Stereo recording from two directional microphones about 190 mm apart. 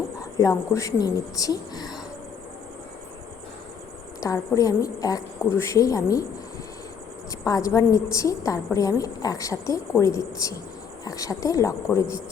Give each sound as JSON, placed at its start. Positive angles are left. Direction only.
{"t": 0.2, "sound": "a woman's voice", "side_deg": 15}
{"t": 4.2, "sound": "a woman's voice", "side_deg": 20}
{"t": 7.3, "sound": "a woman's voice", "side_deg": 20}